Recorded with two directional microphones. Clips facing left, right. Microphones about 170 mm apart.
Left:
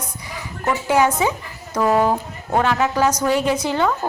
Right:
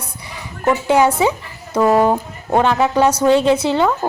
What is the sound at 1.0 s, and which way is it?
Speech, 30° right (ahead or behind).